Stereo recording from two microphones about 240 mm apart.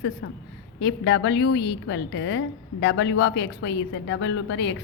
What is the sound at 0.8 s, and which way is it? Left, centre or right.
A woman's voice, left.